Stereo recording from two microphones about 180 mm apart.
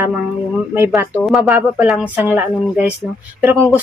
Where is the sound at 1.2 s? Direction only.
Centre (ahead or behind).